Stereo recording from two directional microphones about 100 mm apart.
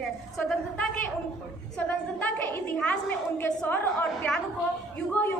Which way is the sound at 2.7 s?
10° left (ahead or behind).